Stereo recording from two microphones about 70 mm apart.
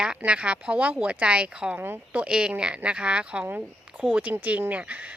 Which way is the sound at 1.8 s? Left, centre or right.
Right.